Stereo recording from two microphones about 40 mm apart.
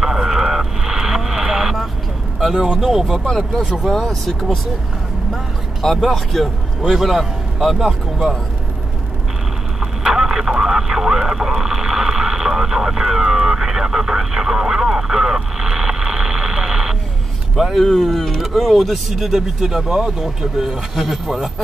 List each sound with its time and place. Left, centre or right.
0.0 s vehicle: centre
2.5 s speech: centre
2.9 s a man's voice: centre
4.0 s a man's voice: centre
6.8 s a man's voice: centre
9.8 s vehicle: centre
17.6 s a man's voice: centre